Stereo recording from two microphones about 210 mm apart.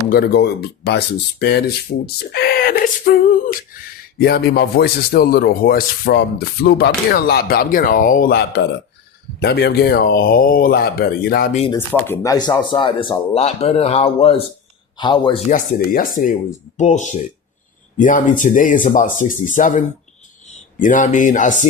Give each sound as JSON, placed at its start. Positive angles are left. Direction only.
{"t": 0.1, "sound": "a man's voice", "side_deg": 50}
{"t": 11.9, "sound": "speech", "side_deg": 10}
{"t": 15.4, "sound": "speech", "side_deg": 40}